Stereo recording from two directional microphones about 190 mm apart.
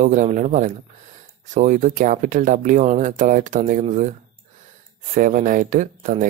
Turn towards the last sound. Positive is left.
turn(degrees=-45)  # may be behind; listen again after turning